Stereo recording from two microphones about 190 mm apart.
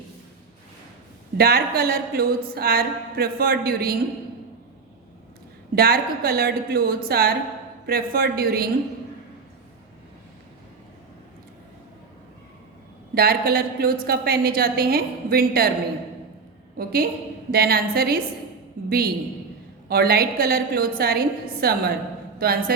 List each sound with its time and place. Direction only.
1.4 s speech: 55° right (ahead or behind)
5.7 s a woman's voice: 55° right (ahead or behind)
13.1 s speech: 50° right (ahead or behind)
16.7 s a woman's voice: 50° right (ahead or behind)